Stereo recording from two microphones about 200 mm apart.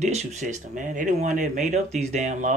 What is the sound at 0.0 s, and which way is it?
Speech, 35° right (ahead or behind).